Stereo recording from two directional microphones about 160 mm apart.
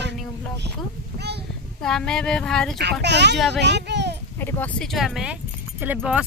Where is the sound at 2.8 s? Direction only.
90° right.